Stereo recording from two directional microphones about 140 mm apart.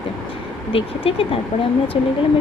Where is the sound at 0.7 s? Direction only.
40° left (ahead or behind).